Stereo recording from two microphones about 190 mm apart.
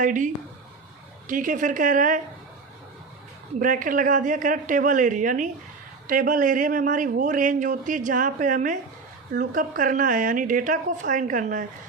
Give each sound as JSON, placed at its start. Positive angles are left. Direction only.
{"t": 0.0, "sound": "a man's voice", "side_deg": -45}
{"t": 1.3, "sound": "a man's voice", "side_deg": -45}
{"t": 3.6, "sound": "a man's voice", "side_deg": -45}